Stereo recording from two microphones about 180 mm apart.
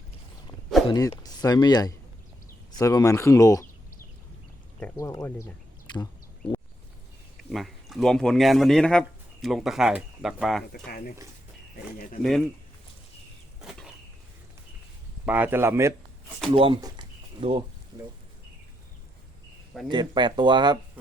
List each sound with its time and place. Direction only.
0.9 s speech: 20° left (ahead or behind)
4.9 s speech: 20° left (ahead or behind)
7.5 s speech: centre (ahead or behind)
10.7 s speech: 55° left (ahead or behind)
12.2 s speech: centre (ahead or behind)
13.7 s a sound: centre (ahead or behind)
15.3 s speech: 10° right (ahead or behind)
16.6 s speech: 30° right (ahead or behind)
19.9 s speech: 25° right (ahead or behind)